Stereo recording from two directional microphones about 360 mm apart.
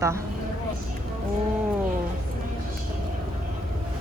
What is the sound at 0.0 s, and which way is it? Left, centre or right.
Speech, centre.